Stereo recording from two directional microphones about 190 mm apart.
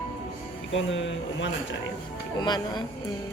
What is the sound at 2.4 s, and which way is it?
Speech, 20° left (ahead or behind).